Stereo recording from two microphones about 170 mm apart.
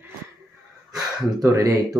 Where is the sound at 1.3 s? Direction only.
20° right (ahead or behind).